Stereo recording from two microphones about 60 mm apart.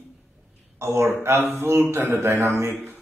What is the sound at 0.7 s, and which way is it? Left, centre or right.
A man's voice, right.